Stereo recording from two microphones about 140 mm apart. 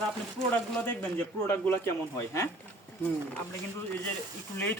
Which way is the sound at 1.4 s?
15° left (ahead or behind).